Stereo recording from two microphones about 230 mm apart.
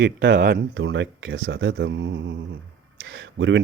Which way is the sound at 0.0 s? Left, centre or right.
Right.